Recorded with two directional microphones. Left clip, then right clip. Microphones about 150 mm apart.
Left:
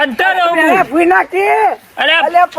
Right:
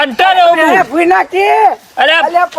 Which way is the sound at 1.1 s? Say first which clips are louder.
Right 2 dB; 65° right (ahead or behind).